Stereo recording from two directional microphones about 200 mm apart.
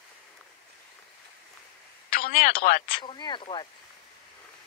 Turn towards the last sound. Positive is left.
turn(degrees=25)  # may be behind; listen again after turning